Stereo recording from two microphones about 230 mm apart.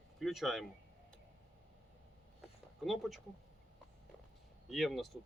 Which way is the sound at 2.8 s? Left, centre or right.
Centre.